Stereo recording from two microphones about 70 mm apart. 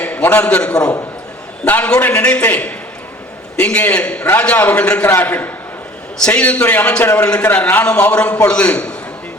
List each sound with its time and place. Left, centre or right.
0.0 s a man's voice: left
3.8 s a man's voice: centre
6.2 s a man's voice: centre
6.6 s a man's voice: left